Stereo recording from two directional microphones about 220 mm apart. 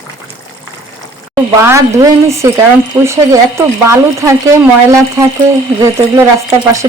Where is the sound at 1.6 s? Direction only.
10° right (ahead or behind).